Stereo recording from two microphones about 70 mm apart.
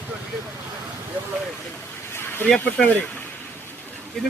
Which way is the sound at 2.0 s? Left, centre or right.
Left.